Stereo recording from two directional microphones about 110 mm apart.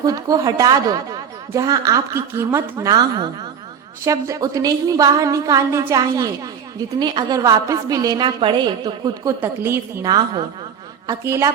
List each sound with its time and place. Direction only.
0.0 s a woman's voice: 35° right (ahead or behind)
2.9 s a woman's voice: 40° right (ahead or behind)
4.0 s a woman's voice: 30° right (ahead or behind)
9.4 s a woman's voice: 20° right (ahead or behind)
10.0 s a woman's voice: 40° right (ahead or behind)